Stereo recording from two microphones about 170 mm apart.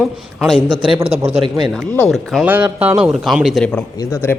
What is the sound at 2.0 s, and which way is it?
Speech, centre (ahead or behind).